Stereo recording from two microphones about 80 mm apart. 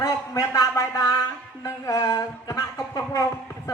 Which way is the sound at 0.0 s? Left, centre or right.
Left.